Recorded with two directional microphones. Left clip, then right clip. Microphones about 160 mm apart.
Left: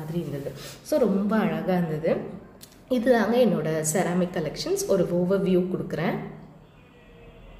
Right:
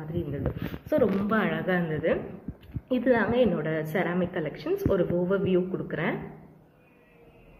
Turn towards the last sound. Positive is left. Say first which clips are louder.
# left 2 dB
turn(degrees=15)  # may be behind; listen again after turning